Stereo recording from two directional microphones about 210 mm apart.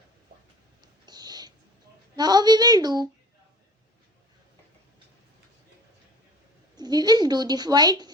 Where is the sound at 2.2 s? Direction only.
20° right (ahead or behind).